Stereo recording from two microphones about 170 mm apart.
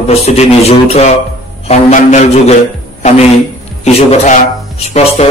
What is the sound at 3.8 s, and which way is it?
Mantra, 40° left (ahead or behind).